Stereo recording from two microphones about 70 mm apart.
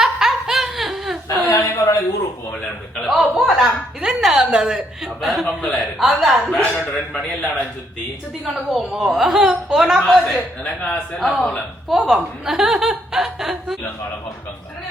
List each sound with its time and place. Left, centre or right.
0.0 s laughter: centre
1.5 s chuckle: left
2.9 s a woman's voice: centre
5.5 s a woman's voice: centre
6.7 s speech: centre
8.4 s a woman's voice: centre
10.6 s a man's voice: left
11.2 s a woman's voice: centre